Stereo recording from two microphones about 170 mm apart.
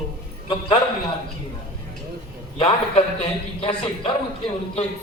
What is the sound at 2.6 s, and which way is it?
Speech, 35° left (ahead or behind).